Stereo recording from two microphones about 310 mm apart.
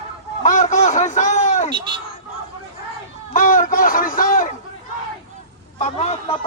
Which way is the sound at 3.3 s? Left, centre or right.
Left.